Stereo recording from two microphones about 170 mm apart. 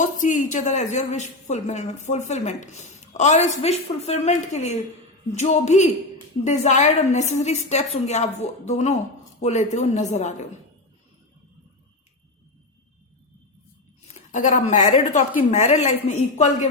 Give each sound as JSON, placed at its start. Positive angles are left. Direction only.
{"t": 0.0, "sound": "a woman's voice", "side_deg": 50}
{"t": 14.1, "sound": "a woman's voice", "side_deg": 45}